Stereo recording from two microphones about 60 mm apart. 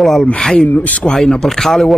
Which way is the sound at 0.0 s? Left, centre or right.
Centre.